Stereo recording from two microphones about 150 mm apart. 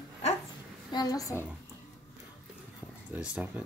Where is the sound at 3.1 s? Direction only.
10° right (ahead or behind).